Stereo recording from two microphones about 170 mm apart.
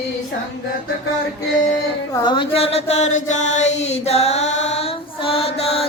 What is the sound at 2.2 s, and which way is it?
Chant, 25° left (ahead or behind).